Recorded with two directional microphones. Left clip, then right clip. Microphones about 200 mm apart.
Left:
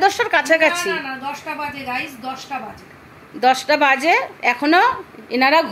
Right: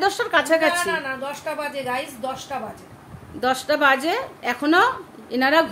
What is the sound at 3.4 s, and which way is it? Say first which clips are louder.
A woman's voice: left 5 dB; 10° left (ahead or behind).